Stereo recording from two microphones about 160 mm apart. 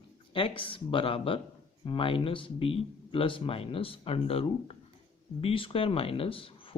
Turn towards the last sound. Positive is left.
turn(degrees=35)  # may be behind; listen again after turning